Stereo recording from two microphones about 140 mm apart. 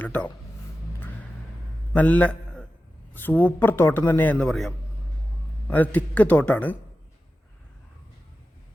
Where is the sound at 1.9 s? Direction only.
10° left (ahead or behind).